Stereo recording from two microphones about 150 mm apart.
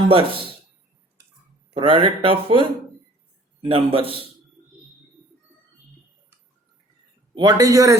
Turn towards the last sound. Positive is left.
turn(degrees=-20)  # may be behind; listen again after turning